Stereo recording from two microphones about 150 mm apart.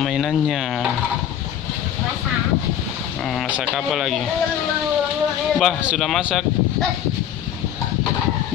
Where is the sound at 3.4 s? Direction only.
5° right (ahead or behind).